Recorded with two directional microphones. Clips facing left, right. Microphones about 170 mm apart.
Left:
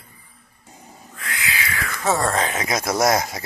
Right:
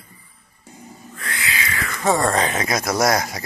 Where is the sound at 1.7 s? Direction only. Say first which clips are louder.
Right 2 dB; centre (ahead or behind).